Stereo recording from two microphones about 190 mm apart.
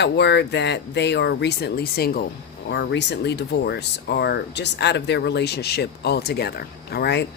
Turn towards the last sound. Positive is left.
turn(degrees=60)  # may be behind; listen again after turning